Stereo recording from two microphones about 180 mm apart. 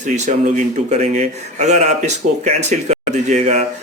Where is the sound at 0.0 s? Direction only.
40° right (ahead or behind).